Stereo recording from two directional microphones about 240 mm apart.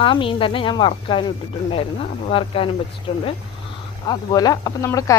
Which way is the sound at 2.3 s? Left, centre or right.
Left.